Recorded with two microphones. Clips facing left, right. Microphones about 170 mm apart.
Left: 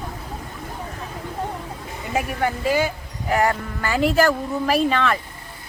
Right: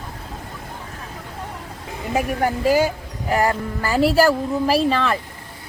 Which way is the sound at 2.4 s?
40° right (ahead or behind).